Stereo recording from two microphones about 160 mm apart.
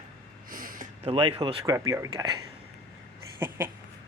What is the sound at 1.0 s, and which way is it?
Speech, 35° right (ahead or behind).